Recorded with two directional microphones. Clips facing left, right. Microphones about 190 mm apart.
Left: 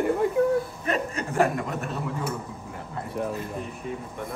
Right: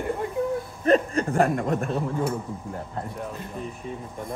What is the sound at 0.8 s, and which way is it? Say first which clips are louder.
Speech: right 8 dB; 35° right (ahead or behind).